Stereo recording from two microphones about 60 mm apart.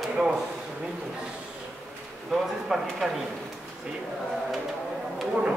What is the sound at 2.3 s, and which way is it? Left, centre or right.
Speech, centre.